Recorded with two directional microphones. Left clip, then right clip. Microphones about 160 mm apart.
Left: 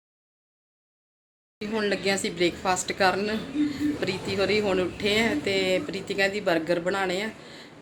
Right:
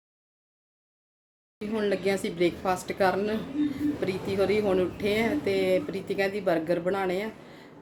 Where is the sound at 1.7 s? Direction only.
10° right (ahead or behind).